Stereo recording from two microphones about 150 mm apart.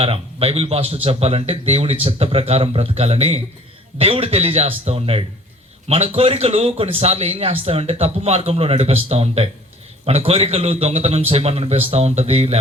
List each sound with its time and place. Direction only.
0.0 s speech: 40° right (ahead or behind)